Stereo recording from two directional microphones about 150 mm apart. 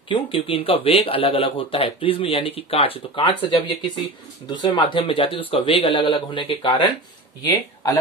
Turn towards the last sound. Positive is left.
turn(degrees=25)  # may be behind; listen again after turning